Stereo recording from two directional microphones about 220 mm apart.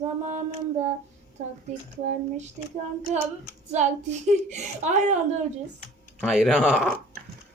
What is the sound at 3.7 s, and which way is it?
A woman's voice, 30° right (ahead or behind).